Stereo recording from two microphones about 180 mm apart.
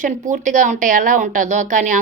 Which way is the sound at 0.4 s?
45° right (ahead or behind).